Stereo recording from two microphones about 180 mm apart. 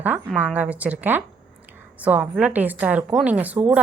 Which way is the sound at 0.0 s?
10° right (ahead or behind).